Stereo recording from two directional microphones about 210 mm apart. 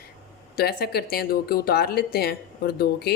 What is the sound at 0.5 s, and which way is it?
Speech, 50° left (ahead or behind).